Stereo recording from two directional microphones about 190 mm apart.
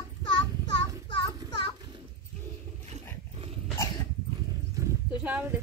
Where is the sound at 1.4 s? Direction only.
25° left (ahead or behind).